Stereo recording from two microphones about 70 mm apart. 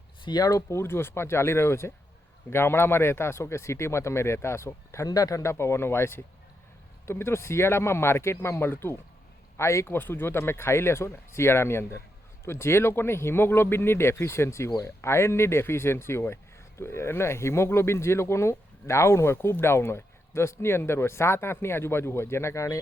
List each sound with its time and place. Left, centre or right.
0.3 s speech: left
0.7 s speech: left
5.0 s speech: left
5.4 s speech: left